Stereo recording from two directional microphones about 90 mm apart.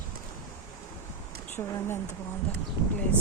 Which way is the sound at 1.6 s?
40° left (ahead or behind).